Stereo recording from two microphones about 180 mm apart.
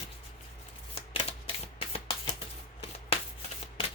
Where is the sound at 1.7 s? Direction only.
30° left (ahead or behind).